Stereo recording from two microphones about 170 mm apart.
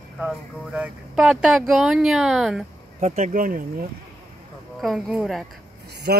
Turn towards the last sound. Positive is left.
turn(degrees=-65)  # may be behind; listen again after turning